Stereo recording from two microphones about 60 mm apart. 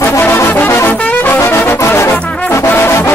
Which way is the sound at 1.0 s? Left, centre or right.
Left.